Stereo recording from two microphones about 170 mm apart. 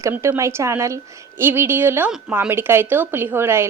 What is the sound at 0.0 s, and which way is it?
A woman's voice, 15° right (ahead or behind).